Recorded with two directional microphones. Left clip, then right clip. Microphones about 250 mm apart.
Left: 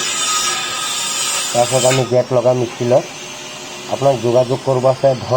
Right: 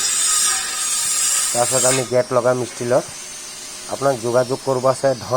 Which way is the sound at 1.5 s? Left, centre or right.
Right.